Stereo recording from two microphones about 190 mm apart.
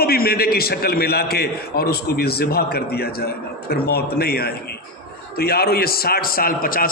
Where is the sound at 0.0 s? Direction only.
55° left (ahead or behind).